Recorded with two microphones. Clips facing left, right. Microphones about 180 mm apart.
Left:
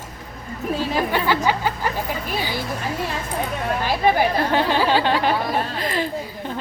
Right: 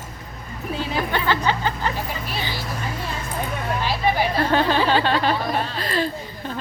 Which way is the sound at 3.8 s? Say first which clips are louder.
Left 4 dB; 50° left (ahead or behind).